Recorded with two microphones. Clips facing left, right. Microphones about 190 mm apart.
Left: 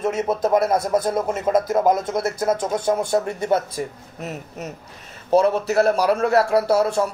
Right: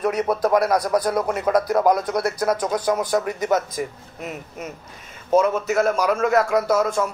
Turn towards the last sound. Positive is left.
turn(degrees=35)  # may be behind; listen again after turning